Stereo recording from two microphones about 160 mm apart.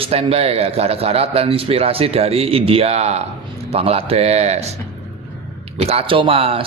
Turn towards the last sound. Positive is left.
turn(degrees=-35)  # may be behind; listen again after turning